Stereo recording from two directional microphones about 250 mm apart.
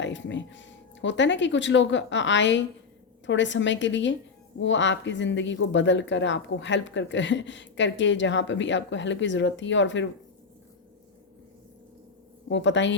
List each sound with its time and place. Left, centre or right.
0.0 s speech: left
12.5 s speech: left